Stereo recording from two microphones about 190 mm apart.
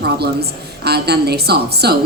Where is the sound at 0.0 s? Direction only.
55° right (ahead or behind).